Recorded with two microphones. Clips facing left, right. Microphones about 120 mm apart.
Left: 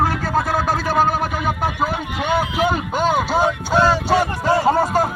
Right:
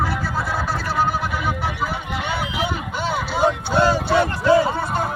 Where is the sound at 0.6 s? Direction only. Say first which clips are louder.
Left 4 dB; 50° left (ahead or behind).